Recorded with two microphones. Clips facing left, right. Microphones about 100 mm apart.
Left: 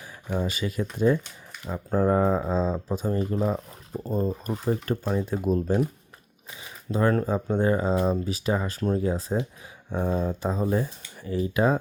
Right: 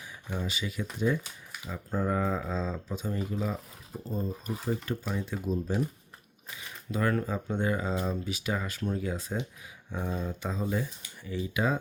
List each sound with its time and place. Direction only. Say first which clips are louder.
0.3 s speech: left 7 dB; 45° left (ahead or behind)
5.4 s speech: left 5 dB; 55° left (ahead or behind)
6.9 s speech: left 6 dB; 30° left (ahead or behind)